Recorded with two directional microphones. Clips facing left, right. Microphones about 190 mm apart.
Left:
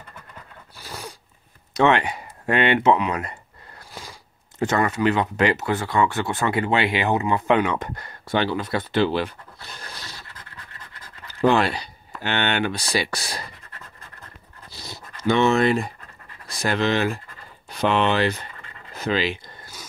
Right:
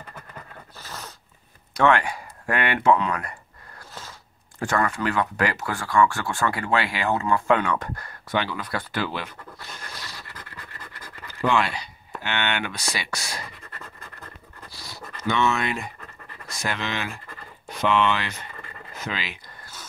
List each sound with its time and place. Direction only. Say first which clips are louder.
0.7 s dog: left 4 dB; 10° left (ahead or behind)
1.7 s speech: left 1 dB; 20° left (ahead or behind)
4.6 s speech: left 3 dB; 20° left (ahead or behind)
11.4 s speech: left 4 dB; 35° left (ahead or behind)
14.7 s dog: left 5 dB; 20° left (ahead or behind)
15.2 s speech: left 6 dB; 35° left (ahead or behind)